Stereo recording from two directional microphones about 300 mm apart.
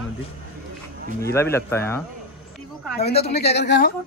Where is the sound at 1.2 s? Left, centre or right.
Centre.